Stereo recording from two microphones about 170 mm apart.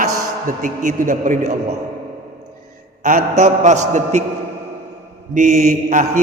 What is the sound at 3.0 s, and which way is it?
A man's voice, 50° right (ahead or behind).